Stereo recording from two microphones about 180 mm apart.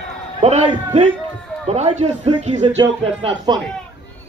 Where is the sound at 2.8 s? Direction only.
30° right (ahead or behind).